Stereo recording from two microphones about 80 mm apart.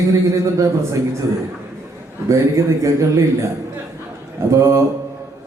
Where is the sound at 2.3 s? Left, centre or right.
Right.